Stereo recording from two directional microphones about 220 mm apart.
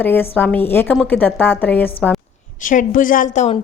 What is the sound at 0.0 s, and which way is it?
A woman's voice, 10° left (ahead or behind).